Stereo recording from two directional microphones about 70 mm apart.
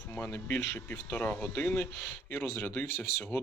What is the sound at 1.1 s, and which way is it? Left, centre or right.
Speech, left.